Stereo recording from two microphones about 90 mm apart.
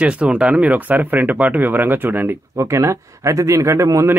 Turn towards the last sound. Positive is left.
turn(degrees=-35)  # may be behind; listen again after turning